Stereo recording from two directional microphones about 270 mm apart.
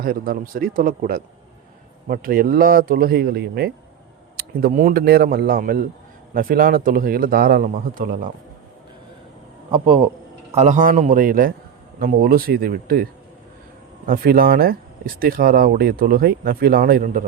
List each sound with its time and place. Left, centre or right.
0.0 s speech: right
9.7 s a man's voice: centre
14.1 s speech: right